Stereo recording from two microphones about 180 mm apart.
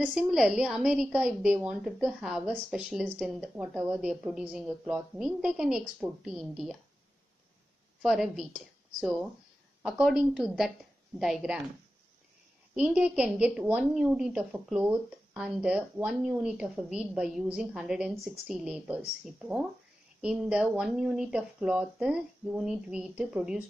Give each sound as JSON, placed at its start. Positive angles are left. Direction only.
{"t": 0.0, "sound": "a woman's voice", "side_deg": -5}
{"t": 8.0, "sound": "a woman's voice", "side_deg": 0}
{"t": 12.7, "sound": "a woman's voice", "side_deg": -5}